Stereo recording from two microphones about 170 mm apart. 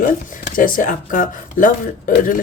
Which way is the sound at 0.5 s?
55° left (ahead or behind).